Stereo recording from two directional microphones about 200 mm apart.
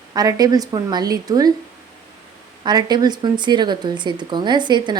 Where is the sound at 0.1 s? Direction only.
20° right (ahead or behind).